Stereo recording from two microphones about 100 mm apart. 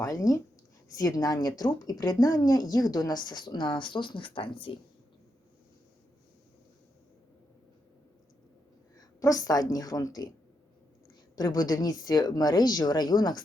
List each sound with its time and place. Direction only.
0.0 s speech: 35° left (ahead or behind); by 4.7 s 60° left (ahead or behind)
9.0 s a woman's voice: 35° left (ahead or behind)
11.3 s speech: 40° left (ahead or behind)